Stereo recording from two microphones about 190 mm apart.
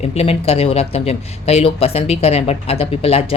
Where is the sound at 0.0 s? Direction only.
35° left (ahead or behind).